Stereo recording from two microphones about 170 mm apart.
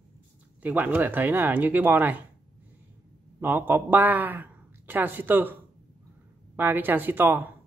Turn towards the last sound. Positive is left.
turn(degrees=-10)  # may be behind; listen again after turning